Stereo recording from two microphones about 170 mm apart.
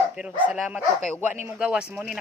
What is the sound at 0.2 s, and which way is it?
Speech, 5° right (ahead or behind).